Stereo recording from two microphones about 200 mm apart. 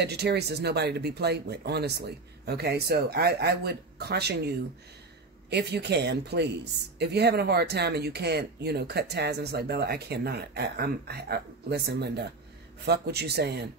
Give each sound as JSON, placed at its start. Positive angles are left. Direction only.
{"t": 0.0, "sound": "speech", "side_deg": -55}